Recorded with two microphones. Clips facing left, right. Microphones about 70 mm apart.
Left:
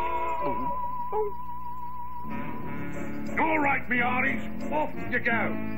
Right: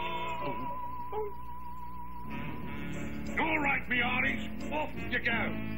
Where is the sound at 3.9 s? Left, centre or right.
Left.